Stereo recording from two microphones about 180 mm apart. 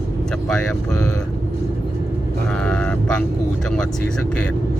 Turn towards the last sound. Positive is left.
turn(degrees=5)  # may be behind; listen again after turning